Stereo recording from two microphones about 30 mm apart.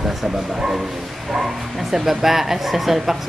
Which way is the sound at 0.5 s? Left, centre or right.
Centre.